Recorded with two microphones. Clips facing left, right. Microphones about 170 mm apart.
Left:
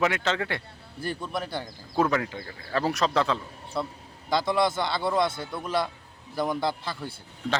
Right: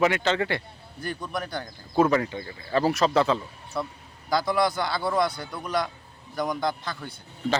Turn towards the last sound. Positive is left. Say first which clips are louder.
# right 2 dB
turn(degrees=5)  # may be behind; listen again after turning